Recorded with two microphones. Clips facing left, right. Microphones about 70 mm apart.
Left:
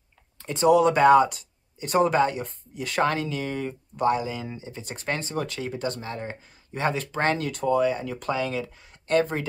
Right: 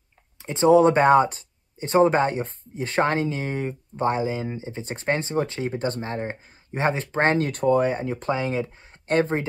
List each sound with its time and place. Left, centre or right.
0.4 s speech: right